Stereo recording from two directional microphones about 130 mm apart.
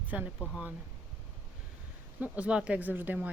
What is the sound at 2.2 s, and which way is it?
Speech, 10° right (ahead or behind).